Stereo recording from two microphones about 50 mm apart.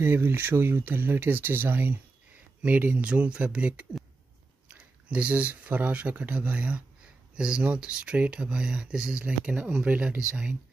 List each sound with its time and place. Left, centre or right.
0.0 s speech: right; by 10.5 s centre